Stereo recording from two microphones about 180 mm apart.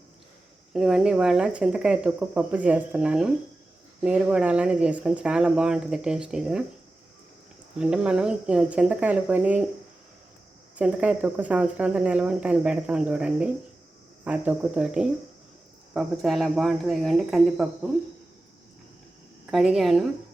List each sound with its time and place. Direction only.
0.7 s speech: centre (ahead or behind)
7.8 s speech: 5° right (ahead or behind)
10.8 s speech: 5° right (ahead or behind)
19.5 s speech: centre (ahead or behind)